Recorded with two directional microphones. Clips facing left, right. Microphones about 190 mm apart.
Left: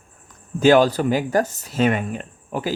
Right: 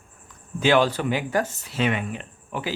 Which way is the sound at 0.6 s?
40° left (ahead or behind).